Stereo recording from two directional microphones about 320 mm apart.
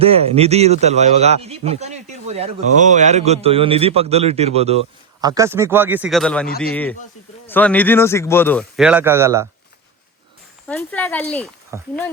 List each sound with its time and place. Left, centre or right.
0.0 s a man's voice: centre
10.7 s speech: centre
11.7 s a man's voice: centre